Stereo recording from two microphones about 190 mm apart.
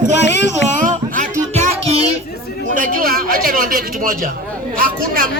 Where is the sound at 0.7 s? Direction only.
40° right (ahead or behind).